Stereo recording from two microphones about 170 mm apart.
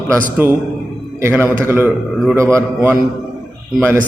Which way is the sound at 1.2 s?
15° right (ahead or behind).